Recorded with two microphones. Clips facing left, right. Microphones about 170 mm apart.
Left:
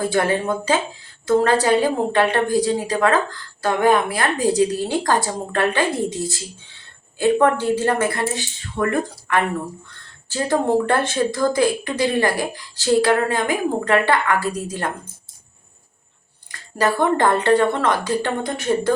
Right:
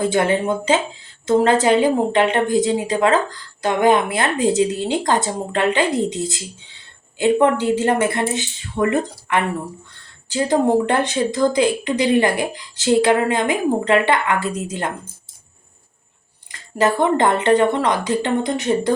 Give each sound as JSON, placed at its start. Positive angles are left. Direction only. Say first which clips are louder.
{"t": 0.0, "sound": "a woman's voice", "louder": "right 2 dB", "side_deg": -20}
{"t": 16.5, "sound": "a woman's voice", "louder": "right 2 dB", "side_deg": -20}